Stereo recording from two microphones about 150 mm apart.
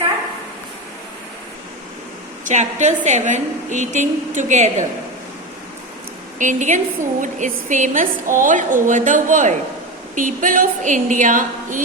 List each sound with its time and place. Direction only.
2.4 s a woman's voice: 55° right (ahead or behind)
6.4 s a woman's voice: 55° right (ahead or behind)